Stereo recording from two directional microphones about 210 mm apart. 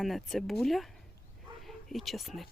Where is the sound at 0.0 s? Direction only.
Centre (ahead or behind).